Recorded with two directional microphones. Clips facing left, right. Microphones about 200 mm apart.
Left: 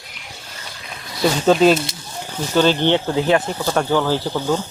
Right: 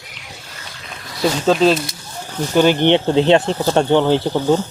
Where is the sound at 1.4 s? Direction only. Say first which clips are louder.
Left 1 dB; 5° left (ahead or behind).